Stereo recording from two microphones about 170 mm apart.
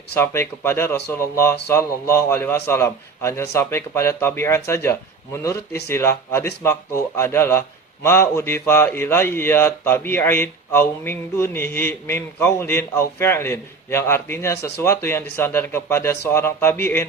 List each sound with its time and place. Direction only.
0.1 s a man's voice: 15° left (ahead or behind)